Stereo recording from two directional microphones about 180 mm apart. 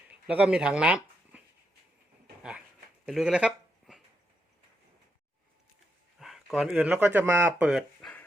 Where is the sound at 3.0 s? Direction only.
Centre (ahead or behind).